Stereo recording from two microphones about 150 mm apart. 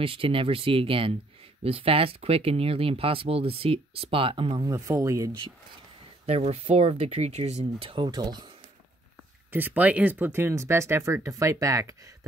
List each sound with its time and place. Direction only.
0.0 s speech: 35° right (ahead or behind)
4.6 s speech: 20° right (ahead or behind)
6.2 s speech: 45° right (ahead or behind)
7.9 s speech: 30° right (ahead or behind)
9.5 s speech: 10° right (ahead or behind)